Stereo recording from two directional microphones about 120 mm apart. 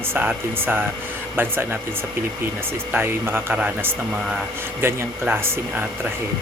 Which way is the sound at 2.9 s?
20° right (ahead or behind).